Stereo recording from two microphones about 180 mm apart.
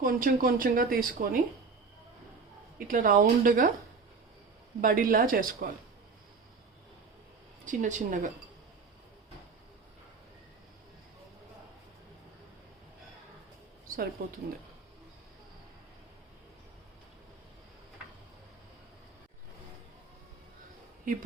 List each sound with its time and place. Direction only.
0.0 s speech: 50° right (ahead or behind)
2.7 s speech: 50° right (ahead or behind)
4.8 s speech: 50° right (ahead or behind)
7.6 s speech: 45° right (ahead or behind)
14.2 s speech: 55° right (ahead or behind)
21.0 s speech: 50° right (ahead or behind)